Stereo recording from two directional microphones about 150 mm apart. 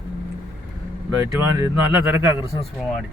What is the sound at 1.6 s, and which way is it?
Speech, 15° right (ahead or behind).